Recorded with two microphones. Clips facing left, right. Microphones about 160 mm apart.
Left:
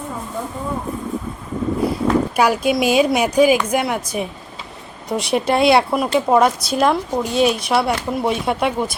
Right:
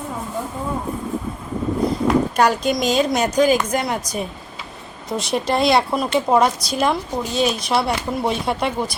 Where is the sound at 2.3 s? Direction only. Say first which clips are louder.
Left 1 dB; 5° left (ahead or behind).